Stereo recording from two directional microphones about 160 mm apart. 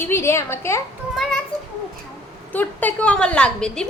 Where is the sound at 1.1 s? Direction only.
Centre (ahead or behind).